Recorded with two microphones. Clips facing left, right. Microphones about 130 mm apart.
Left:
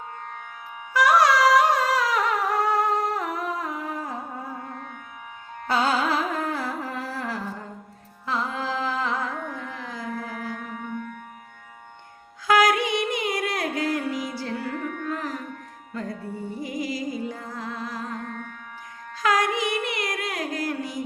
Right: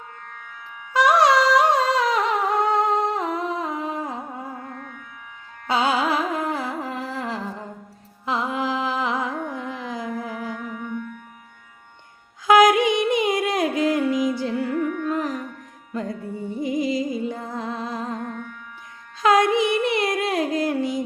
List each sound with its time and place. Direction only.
0.9 s humming: 20° right (ahead or behind)
5.6 s music: 15° right (ahead or behind)
8.3 s carnatic music: 15° right (ahead or behind)
10.5 s music: 45° left (ahead or behind)
12.5 s music: 20° right (ahead or behind)
19.2 s music: 25° right (ahead or behind)